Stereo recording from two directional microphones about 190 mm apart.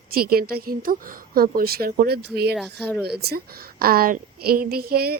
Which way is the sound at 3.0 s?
60° right (ahead or behind).